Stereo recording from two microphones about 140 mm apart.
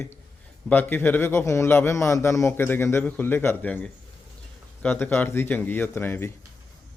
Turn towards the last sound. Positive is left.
turn(degrees=15)  # may be behind; listen again after turning